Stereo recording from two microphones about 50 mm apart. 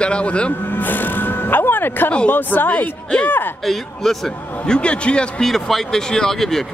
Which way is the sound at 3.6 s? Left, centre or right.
Centre.